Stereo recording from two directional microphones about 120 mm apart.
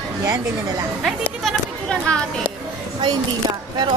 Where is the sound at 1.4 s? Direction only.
5° left (ahead or behind).